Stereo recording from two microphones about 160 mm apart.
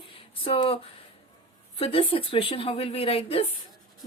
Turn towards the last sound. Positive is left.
turn(degrees=35)  # may be behind; listen again after turning